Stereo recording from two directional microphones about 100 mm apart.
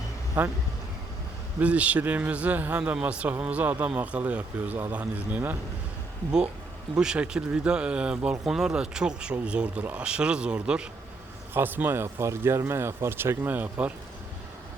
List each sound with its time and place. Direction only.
0.4 s a man's voice: 15° right (ahead or behind)
1.5 s a man's voice: 15° right (ahead or behind)
7.0 s a man's voice: 5° right (ahead or behind)